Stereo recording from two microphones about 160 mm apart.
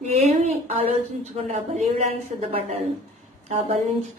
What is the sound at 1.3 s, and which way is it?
A woman's voice, 40° right (ahead or behind).